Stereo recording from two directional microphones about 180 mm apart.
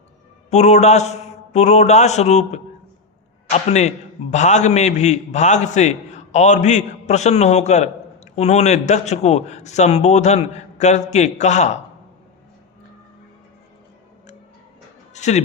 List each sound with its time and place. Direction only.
0.5 s a man's voice: 40° left (ahead or behind)
15.1 s music: 40° left (ahead or behind)